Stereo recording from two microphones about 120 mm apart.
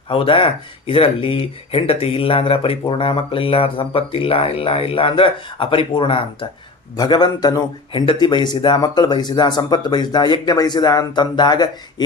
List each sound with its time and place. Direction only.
0.1 s speech: 45° left (ahead or behind)
6.9 s speech: 35° left (ahead or behind)